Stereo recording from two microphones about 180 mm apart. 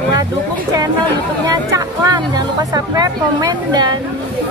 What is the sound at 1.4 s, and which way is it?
Speech, 20° right (ahead or behind).